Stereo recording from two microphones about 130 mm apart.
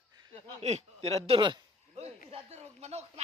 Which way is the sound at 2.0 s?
55° right (ahead or behind).